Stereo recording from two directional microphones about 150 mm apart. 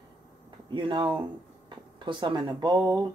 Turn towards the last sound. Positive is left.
turn(degrees=-25)  # may be behind; listen again after turning